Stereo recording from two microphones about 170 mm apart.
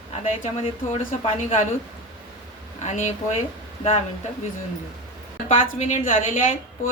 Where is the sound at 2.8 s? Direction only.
45° left (ahead or behind).